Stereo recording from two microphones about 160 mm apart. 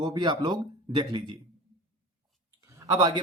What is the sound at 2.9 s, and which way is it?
Speech, 25° right (ahead or behind).